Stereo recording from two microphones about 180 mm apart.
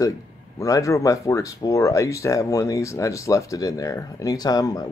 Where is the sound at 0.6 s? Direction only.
20° left (ahead or behind).